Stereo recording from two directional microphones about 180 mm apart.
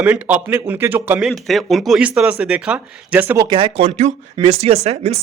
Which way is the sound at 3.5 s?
30° right (ahead or behind).